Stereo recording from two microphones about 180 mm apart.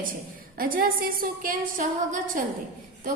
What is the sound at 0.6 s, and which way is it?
A woman's voice, 50° right (ahead or behind).